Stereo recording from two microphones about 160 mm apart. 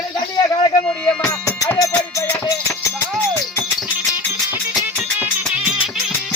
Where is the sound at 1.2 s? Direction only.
20° left (ahead or behind).